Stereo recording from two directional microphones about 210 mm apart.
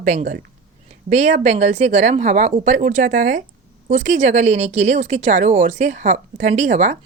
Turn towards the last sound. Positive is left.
turn(degrees=-35)  # may be behind; listen again after turning